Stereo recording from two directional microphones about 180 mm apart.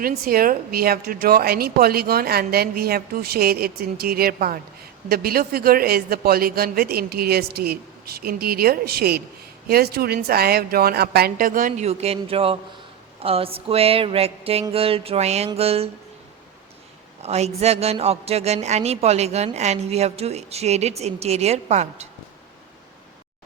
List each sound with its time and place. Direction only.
0.0 s a woman's voice: 55° right (ahead or behind)
11.9 s a woman's voice: 35° right (ahead or behind)
17.2 s a woman's voice: 35° right (ahead or behind)